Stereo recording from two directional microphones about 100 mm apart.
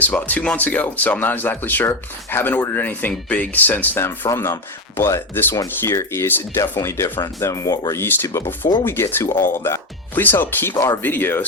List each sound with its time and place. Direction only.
0.0 s speech: 15° left (ahead or behind)